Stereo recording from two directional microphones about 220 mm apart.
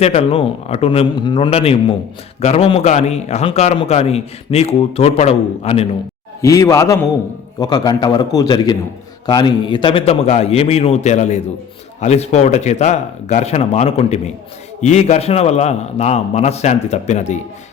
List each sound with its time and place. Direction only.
0.0 s a man's voice: 30° left (ahead or behind)
6.4 s a man's voice: 15° left (ahead or behind); by 17.4 s 30° left (ahead or behind)